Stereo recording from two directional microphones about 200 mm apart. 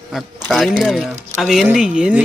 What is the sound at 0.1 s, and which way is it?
Speech, centre (ahead or behind).